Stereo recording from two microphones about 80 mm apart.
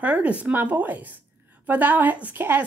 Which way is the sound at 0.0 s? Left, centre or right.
Centre.